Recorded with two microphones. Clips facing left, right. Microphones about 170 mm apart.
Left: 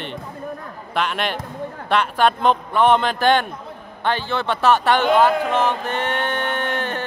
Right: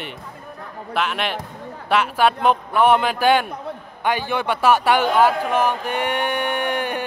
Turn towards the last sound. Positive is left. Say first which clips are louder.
# right 1 dB
turn(degrees=-15)  # may be behind; listen again after turning